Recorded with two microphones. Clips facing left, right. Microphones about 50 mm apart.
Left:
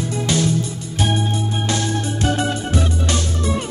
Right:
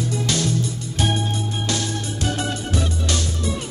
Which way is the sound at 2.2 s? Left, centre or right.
Left.